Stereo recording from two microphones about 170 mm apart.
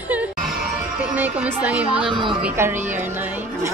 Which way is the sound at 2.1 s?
25° right (ahead or behind).